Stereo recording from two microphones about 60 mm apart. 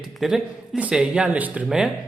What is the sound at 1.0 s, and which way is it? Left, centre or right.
Speech, right.